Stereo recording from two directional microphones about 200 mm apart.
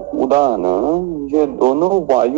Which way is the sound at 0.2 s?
40° right (ahead or behind).